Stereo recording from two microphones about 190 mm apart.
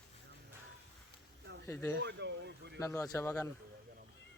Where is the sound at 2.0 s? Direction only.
65° right (ahead or behind).